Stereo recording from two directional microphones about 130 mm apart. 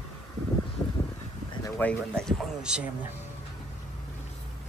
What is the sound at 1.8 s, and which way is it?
Speech, 10° left (ahead or behind).